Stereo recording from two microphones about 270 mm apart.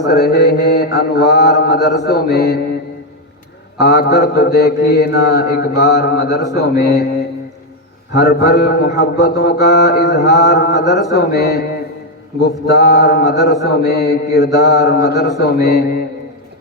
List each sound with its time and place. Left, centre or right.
0.1 s mantra: left
3.8 s mantra: left
8.1 s mantra: left
12.7 s mantra: left
14.5 s mantra: centre
14.8 s mantra: left